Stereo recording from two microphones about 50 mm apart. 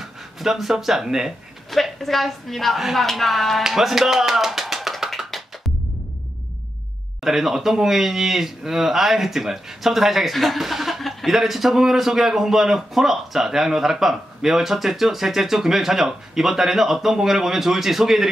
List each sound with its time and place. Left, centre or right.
0.0 s speech: centre
1.7 s speech: centre
3.6 s music: centre
7.2 s speech: centre